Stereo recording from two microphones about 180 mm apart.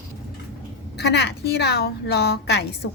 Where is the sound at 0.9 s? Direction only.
70° left (ahead or behind).